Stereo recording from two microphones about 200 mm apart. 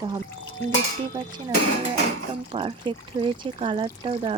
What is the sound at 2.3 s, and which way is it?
Speech, 25° right (ahead or behind).